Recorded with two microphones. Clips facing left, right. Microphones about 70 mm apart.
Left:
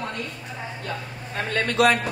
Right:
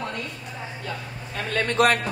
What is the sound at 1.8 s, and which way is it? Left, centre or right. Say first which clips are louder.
Speech: left 1 dB; right.